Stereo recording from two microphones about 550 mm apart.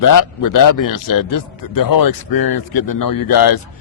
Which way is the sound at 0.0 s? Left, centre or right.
Left.